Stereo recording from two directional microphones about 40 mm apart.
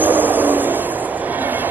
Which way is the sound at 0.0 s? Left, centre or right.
Right.